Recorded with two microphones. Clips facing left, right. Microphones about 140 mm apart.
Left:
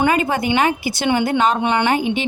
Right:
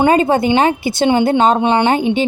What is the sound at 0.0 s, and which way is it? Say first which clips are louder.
A woman's voice: right 5 dB; 30° right (ahead or behind).